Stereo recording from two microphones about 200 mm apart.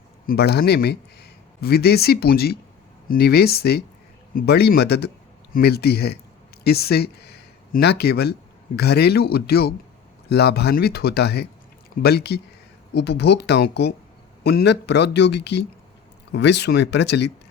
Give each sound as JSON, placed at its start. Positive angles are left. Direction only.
{"t": 0.3, "sound": "speech", "side_deg": 55}